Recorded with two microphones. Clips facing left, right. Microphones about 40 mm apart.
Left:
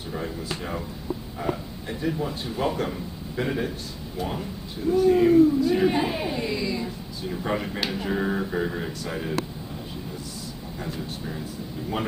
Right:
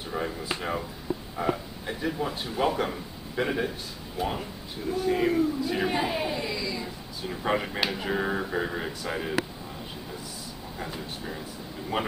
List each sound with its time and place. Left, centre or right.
0.1 s a man's voice: centre
7.4 s speech: centre
10.8 s speech: centre